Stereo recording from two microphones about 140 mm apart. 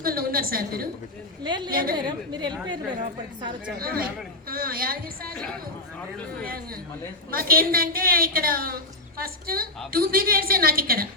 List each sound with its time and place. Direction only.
0.0 s a woman's voice: 90° right
1.5 s a woman's voice: 30° right (ahead or behind)
1.7 s a woman's voice: 90° right
2.0 s a woman's voice: 30° right (ahead or behind)
3.8 s a woman's voice: 90° right
5.3 s speech: 5° left (ahead or behind)
7.3 s a woman's voice: 90° right